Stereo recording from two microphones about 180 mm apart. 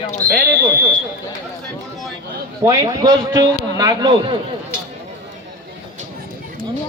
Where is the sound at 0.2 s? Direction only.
50° right (ahead or behind).